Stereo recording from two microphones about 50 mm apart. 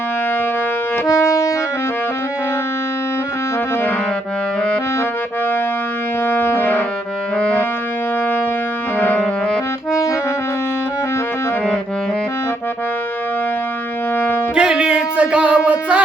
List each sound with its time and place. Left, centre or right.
6.2 s music: left
7.3 s music: left
9.0 s music: left
14.5 s music: centre